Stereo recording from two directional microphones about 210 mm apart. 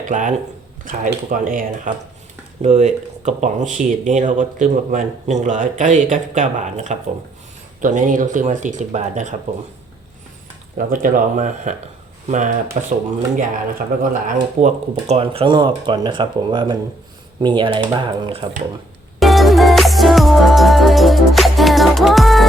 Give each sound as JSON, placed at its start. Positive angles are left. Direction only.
{"t": 0.0, "sound": "speech", "side_deg": -35}
{"t": 10.8, "sound": "speech", "side_deg": -40}
{"t": 19.2, "sound": "music", "side_deg": 0}